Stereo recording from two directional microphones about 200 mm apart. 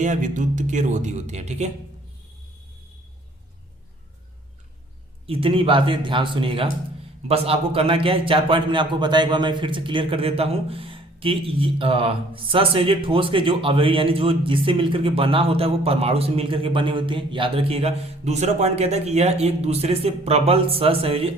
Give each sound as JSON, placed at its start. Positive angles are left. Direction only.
{"t": 0.0, "sound": "speech", "side_deg": -40}
{"t": 5.2, "sound": "a man's voice", "side_deg": -25}